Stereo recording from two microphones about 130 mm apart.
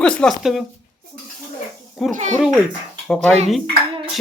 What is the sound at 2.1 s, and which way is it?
Speech, 65° right (ahead or behind).